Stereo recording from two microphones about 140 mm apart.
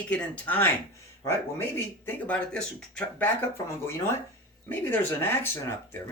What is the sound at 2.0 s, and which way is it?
Speech, 10° left (ahead or behind).